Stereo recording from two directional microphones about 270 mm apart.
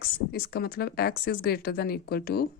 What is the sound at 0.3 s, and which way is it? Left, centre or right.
A woman's voice, left.